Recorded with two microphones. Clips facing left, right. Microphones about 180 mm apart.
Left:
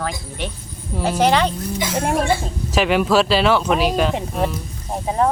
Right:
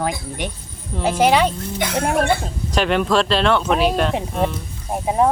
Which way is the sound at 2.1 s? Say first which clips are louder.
Right 1 dB; 60° right (ahead or behind).